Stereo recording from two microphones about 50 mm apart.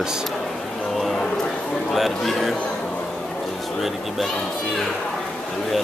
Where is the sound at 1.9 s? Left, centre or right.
Centre.